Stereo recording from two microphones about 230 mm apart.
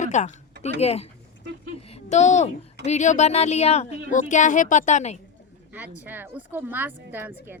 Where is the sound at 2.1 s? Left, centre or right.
Left.